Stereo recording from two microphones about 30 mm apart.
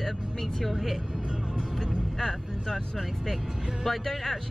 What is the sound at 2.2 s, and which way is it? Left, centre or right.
Speech, centre.